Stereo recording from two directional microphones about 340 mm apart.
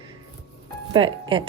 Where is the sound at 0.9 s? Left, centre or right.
Centre.